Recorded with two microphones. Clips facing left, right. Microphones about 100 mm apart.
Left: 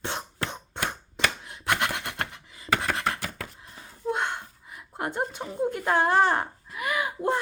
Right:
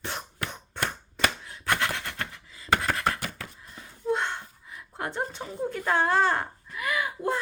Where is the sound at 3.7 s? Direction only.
15° left (ahead or behind).